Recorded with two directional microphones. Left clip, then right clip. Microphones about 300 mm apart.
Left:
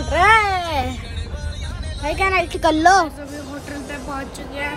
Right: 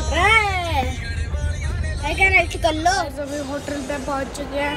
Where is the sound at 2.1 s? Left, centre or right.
Centre.